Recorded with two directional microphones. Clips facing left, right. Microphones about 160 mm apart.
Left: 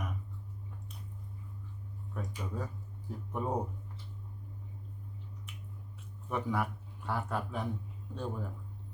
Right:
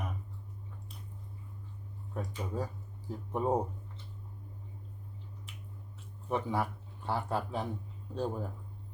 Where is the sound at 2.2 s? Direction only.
30° right (ahead or behind).